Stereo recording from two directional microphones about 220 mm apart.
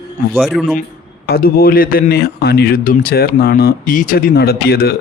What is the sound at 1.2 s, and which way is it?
A man's voice, 45° left (ahead or behind).